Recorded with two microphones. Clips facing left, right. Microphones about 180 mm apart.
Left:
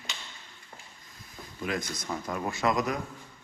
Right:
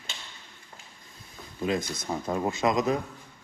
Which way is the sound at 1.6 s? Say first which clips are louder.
Right 4 dB; 25° right (ahead or behind).